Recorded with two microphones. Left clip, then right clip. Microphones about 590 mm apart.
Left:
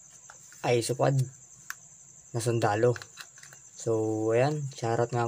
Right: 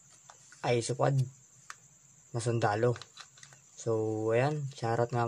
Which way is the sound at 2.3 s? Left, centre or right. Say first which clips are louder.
Left 3 dB; right.